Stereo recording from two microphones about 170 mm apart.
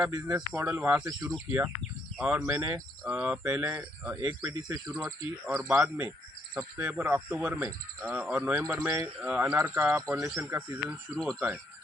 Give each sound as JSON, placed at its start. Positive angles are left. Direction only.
{"t": 0.0, "sound": "speech", "side_deg": -25}
{"t": 0.6, "sound": "speech", "side_deg": -10}
{"t": 1.0, "sound": "speech", "side_deg": -20}
{"t": 2.1, "sound": "speech", "side_deg": -5}
{"t": 2.5, "sound": "speech", "side_deg": -20}
{"t": 3.0, "sound": "speech", "side_deg": -5}
{"t": 3.4, "sound": "speech", "side_deg": -20}
{"t": 4.2, "sound": "speech", "side_deg": -20}
{"t": 5.5, "sound": "speech", "side_deg": -10}